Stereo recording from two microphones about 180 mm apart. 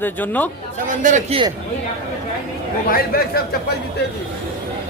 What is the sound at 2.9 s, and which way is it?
Speech, 55° left (ahead or behind).